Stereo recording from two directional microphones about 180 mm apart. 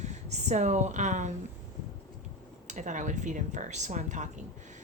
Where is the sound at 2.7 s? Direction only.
45° right (ahead or behind).